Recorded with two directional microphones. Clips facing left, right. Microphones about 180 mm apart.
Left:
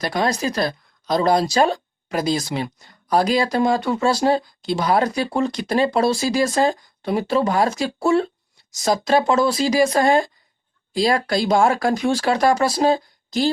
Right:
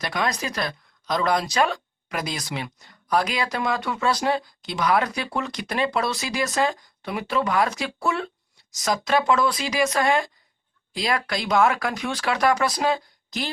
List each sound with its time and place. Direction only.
0.0 s speech: 35° left (ahead or behind)